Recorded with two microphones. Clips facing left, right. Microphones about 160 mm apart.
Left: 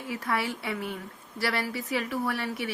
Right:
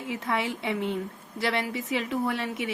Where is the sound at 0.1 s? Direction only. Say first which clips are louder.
Right 1 dB; 20° right (ahead or behind).